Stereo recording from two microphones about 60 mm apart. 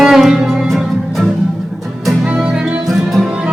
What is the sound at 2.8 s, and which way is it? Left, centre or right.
Music, centre.